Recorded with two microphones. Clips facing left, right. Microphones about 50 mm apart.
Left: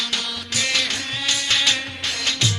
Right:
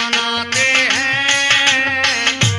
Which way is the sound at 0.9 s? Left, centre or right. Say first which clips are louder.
Right 10 dB; right.